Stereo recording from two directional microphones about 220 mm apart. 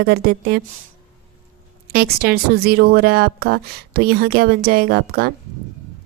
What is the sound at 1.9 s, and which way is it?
Speech, 45° right (ahead or behind).